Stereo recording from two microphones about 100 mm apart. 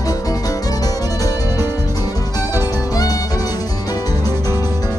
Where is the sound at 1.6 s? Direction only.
25° right (ahead or behind).